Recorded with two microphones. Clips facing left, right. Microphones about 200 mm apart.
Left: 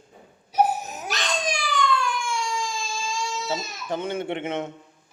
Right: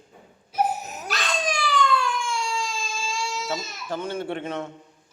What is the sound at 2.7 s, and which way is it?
Baby cry, 15° left (ahead or behind).